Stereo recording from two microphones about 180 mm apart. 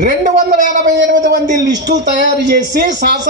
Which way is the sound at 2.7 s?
70° right (ahead or behind).